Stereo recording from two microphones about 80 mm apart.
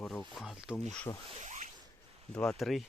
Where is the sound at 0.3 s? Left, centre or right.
Centre.